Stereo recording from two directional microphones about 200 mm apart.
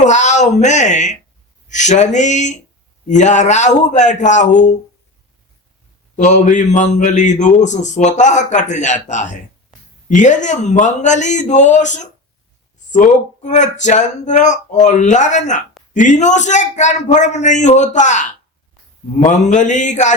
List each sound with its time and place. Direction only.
0.0 s a man's voice: 35° left (ahead or behind)
6.1 s a man's voice: 35° left (ahead or behind)